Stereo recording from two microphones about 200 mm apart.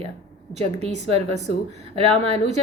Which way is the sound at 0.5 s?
35° right (ahead or behind).